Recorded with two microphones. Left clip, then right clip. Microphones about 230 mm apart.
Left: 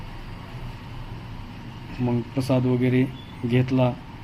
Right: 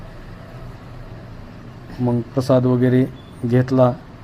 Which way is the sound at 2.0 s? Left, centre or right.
Right.